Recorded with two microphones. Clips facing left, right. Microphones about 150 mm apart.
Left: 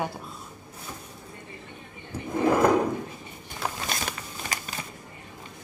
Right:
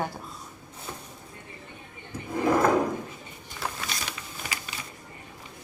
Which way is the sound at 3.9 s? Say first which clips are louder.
Left 4 dB; 45° left (ahead or behind).